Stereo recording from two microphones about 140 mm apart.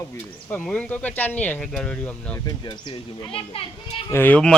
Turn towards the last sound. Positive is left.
turn(degrees=10)  # may be behind; listen again after turning